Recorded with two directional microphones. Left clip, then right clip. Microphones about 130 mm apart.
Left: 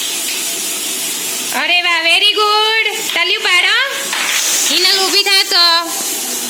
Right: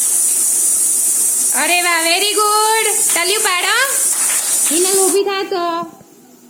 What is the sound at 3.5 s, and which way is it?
Speech, 15° right (ahead or behind).